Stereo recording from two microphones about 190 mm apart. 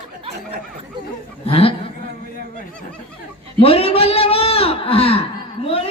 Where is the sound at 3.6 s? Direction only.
30° left (ahead or behind).